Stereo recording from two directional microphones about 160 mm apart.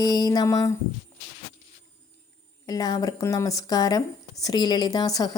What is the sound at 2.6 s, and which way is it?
Speech, 25° left (ahead or behind).